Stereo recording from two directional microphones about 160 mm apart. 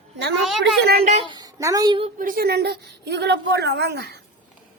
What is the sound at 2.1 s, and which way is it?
A woman's voice, 60° right (ahead or behind).